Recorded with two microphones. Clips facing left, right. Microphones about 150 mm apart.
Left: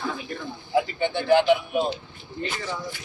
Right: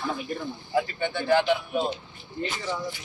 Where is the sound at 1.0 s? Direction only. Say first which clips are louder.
Left 4 dB; 20° left (ahead or behind).